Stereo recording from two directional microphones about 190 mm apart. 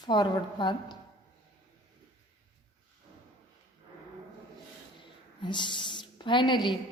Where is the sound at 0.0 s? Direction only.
25° left (ahead or behind).